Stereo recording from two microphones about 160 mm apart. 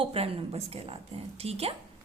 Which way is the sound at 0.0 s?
40° right (ahead or behind).